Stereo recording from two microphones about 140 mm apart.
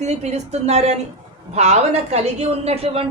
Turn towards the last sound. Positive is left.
turn(degrees=-45)  # may be behind; listen again after turning